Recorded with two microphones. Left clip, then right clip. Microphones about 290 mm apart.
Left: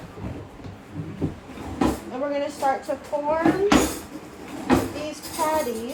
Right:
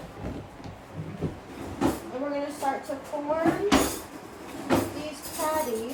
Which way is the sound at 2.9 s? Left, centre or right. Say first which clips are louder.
Left 6 dB; left.